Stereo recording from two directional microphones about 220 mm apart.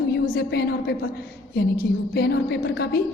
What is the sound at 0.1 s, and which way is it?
Speech, 50° left (ahead or behind).